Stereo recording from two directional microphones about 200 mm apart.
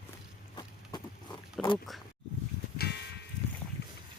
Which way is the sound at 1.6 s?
Centre (ahead or behind).